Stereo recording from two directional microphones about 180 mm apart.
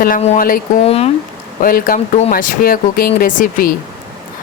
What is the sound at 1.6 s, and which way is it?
Speech, 50° left (ahead or behind).